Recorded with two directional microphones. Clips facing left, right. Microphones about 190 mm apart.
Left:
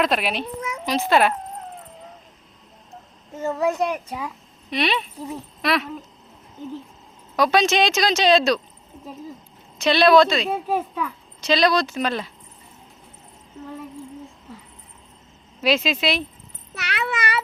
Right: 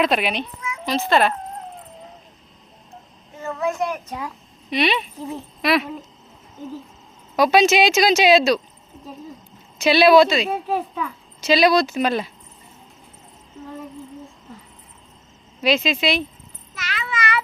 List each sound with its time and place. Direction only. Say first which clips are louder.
0.0 s speech: right 2 dB; centre (ahead or behind)
3.4 s a child's voice: left 2 dB; 25° left (ahead or behind); by 4.3 s 10° left (ahead or behind)
4.7 s a woman's voice: right 2 dB; centre (ahead or behind)
7.3 s speech: right 3 dB; 10° right (ahead or behind)
9.7 s a woman's voice: right 2 dB; 5° right (ahead or behind)
15.6 s speech: right 1 dB; 5° left (ahead or behind)
16.7 s a child's voice: left 3 dB; 65° left (ahead or behind)